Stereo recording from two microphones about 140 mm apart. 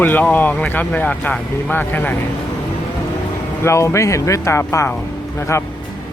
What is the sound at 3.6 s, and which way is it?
Speech, 20° left (ahead or behind).